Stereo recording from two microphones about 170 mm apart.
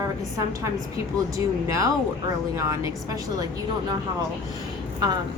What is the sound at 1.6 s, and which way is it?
A woman's voice, 20° right (ahead or behind).